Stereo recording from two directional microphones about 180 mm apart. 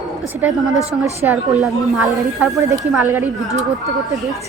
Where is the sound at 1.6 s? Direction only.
Centre (ahead or behind).